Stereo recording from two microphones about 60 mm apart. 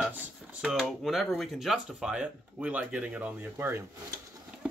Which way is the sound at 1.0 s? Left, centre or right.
Centre.